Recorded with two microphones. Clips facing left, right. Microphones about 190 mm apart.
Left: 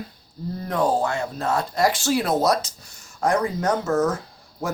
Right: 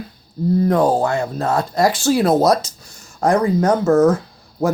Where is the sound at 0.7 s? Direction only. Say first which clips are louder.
Right 1 dB; 40° right (ahead or behind).